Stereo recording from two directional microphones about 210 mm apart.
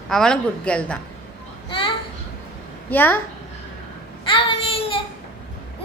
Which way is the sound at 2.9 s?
10° left (ahead or behind).